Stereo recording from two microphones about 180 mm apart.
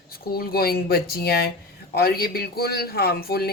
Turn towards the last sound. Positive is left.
turn(degrees=60)  # may be behind; listen again after turning